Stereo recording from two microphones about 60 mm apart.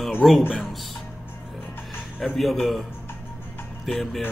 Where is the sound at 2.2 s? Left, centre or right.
Centre.